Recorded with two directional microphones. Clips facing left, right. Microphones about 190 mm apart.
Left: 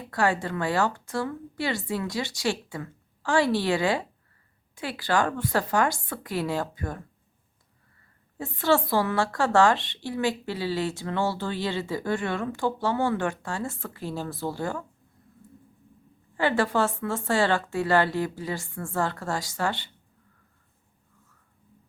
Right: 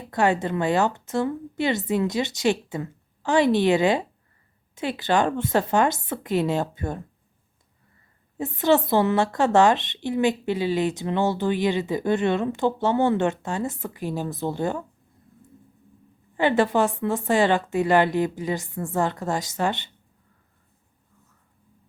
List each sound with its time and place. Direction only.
0.0 s a woman's voice: 20° right (ahead or behind)
8.4 s a woman's voice: 20° right (ahead or behind)
16.4 s a woman's voice: 20° right (ahead or behind)